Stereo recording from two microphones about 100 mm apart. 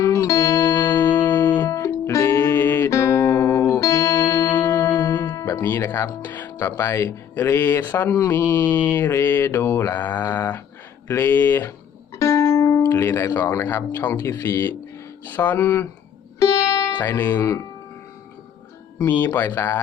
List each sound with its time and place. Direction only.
0.0 s music: 30° left (ahead or behind)
1.3 s music: 20° left (ahead or behind)
1.6 s music: 30° left (ahead or behind)
5.5 s speech: 25° left (ahead or behind)
16.4 s music: 30° left (ahead or behind)
17.0 s speech: 25° left (ahead or behind)
18.9 s speech: 20° left (ahead or behind)